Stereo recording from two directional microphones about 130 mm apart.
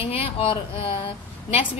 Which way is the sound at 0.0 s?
50° left (ahead or behind).